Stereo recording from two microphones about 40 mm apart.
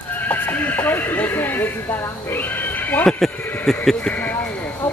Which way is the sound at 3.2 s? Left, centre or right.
Centre.